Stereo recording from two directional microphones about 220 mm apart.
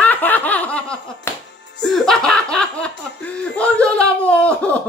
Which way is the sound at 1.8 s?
Centre (ahead or behind).